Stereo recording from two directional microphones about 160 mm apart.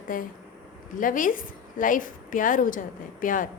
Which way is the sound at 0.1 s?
60° left (ahead or behind).